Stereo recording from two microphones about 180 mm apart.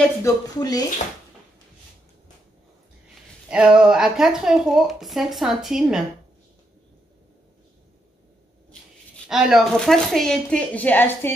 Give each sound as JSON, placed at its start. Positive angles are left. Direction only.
{"t": 0.2, "sound": "speech", "side_deg": 20}
{"t": 3.4, "sound": "a woman's voice", "side_deg": -5}
{"t": 9.3, "sound": "a woman's voice", "side_deg": 0}